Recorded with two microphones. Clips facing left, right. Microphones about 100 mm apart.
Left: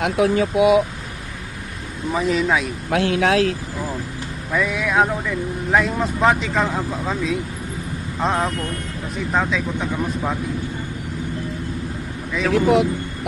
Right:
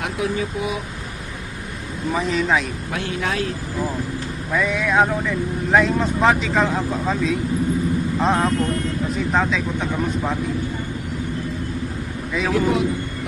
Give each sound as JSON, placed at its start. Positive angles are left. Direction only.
{"t": 0.0, "sound": "speech", "side_deg": 75}
{"t": 2.1, "sound": "speech", "side_deg": 0}
{"t": 2.9, "sound": "speech", "side_deg": 75}
{"t": 4.5, "sound": "speech", "side_deg": 0}
{"t": 12.5, "sound": "speech", "side_deg": 70}